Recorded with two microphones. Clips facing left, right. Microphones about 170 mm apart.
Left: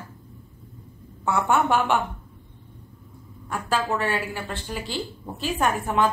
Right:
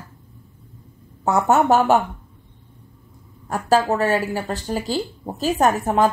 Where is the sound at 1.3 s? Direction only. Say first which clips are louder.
Right 5 dB; 40° right (ahead or behind).